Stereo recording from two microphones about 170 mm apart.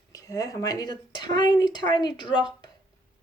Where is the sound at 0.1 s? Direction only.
20° left (ahead or behind).